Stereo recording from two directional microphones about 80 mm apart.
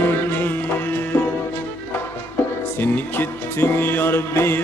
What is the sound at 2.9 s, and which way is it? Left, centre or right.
Speech, left.